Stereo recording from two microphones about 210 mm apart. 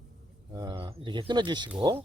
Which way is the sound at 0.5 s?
20° right (ahead or behind).